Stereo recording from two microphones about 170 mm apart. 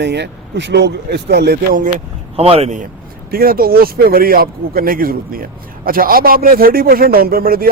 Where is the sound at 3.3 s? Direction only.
60° right (ahead or behind).